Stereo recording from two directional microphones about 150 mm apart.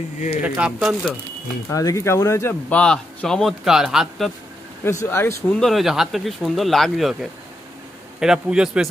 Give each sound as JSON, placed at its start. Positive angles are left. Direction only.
{"t": 0.4, "sound": "a man's voice", "side_deg": -5}
{"t": 1.7, "sound": "speech", "side_deg": 20}
{"t": 2.7, "sound": "a man's voice", "side_deg": 5}
{"t": 5.0, "sound": "speech", "side_deg": 15}
{"t": 5.6, "sound": "a man's voice", "side_deg": 0}
{"t": 8.2, "sound": "a man's voice", "side_deg": -5}